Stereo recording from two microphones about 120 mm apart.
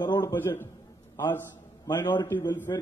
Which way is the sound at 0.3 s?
20° left (ahead or behind).